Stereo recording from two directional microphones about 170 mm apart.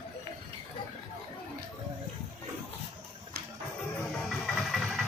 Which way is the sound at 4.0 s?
Centre (ahead or behind).